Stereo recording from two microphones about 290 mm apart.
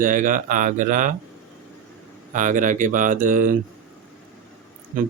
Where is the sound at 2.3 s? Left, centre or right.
Right.